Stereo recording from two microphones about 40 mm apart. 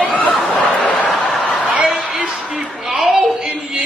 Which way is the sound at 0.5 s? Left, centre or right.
Left.